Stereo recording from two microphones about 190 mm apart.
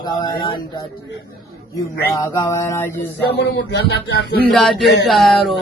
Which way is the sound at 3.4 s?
60° left (ahead or behind).